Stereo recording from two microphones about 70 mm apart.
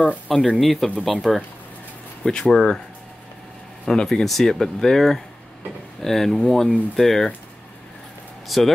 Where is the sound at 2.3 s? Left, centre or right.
Centre.